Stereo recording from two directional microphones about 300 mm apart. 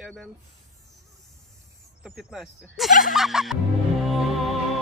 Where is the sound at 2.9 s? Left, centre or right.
Left.